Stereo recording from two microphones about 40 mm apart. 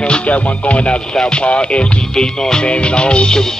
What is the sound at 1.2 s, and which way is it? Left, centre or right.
Speech, left.